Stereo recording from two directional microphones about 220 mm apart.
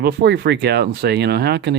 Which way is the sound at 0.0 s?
45° right (ahead or behind).